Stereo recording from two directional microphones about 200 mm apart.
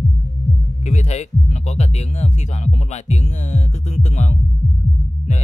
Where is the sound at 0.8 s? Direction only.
35° left (ahead or behind).